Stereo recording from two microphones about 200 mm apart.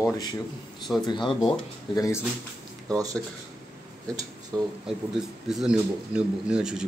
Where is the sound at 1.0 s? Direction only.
25° left (ahead or behind).